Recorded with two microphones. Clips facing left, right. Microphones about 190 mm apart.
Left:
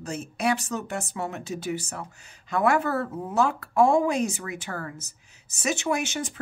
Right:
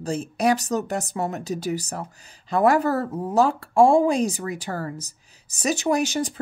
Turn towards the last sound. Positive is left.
turn(degrees=-35)  # may be behind; listen again after turning